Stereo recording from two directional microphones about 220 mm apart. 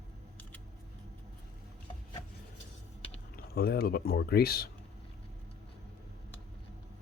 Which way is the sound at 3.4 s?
45° left (ahead or behind).